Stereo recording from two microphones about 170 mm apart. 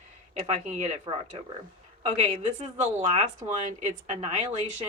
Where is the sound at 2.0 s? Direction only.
40° right (ahead or behind).